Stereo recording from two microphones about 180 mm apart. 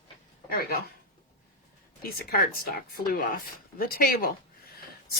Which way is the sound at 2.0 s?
55° left (ahead or behind).